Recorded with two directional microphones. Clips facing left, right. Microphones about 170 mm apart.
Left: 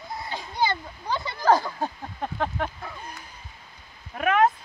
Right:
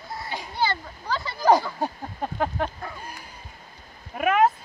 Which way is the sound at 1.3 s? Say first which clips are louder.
Right 2 dB; 15° right (ahead or behind).